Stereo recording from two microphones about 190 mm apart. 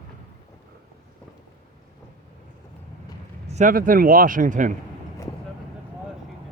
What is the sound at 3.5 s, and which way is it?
Speech, 40° right (ahead or behind).